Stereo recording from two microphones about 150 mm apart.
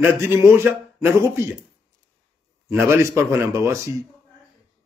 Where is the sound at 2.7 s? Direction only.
15° right (ahead or behind).